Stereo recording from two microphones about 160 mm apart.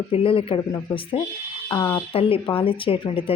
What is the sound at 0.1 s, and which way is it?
Speech, 35° left (ahead or behind).